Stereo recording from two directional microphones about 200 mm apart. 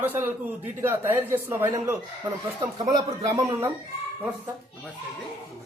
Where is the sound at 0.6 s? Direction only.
10° right (ahead or behind).